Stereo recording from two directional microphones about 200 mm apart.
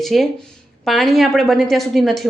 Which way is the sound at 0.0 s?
Centre (ahead or behind).